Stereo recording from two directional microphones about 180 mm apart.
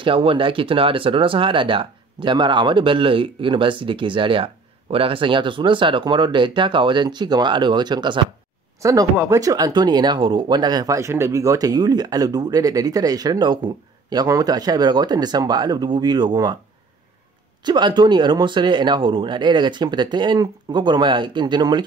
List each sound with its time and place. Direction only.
0.0 s speech: 30° right (ahead or behind)
17.6 s speech: 25° right (ahead or behind)